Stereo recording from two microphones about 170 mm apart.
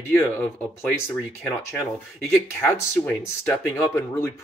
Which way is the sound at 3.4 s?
15° left (ahead or behind).